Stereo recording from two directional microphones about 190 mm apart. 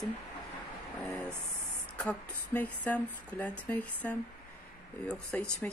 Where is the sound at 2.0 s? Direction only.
5° left (ahead or behind).